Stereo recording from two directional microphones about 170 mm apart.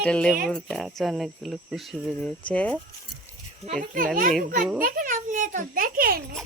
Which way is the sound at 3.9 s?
55° right (ahead or behind).